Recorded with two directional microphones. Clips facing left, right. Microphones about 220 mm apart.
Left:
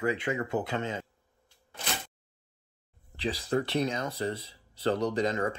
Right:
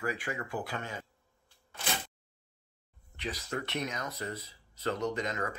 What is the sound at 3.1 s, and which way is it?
Speech, 30° left (ahead or behind).